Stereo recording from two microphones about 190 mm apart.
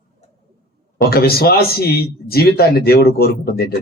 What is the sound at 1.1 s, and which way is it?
A man's voice, 55° left (ahead or behind).